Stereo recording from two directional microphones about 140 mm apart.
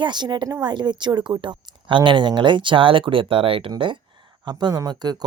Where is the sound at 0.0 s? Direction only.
30° right (ahead or behind).